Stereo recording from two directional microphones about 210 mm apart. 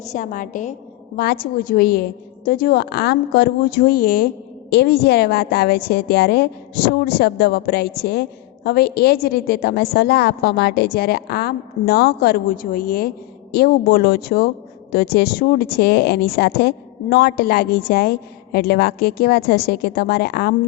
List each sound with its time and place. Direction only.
0.0 s a woman's voice: 35° left (ahead or behind)